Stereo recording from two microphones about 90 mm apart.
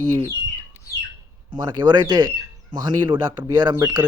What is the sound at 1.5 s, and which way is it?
Speech, 50° right (ahead or behind).